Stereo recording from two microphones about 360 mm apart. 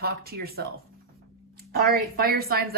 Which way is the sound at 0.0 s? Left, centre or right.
Right.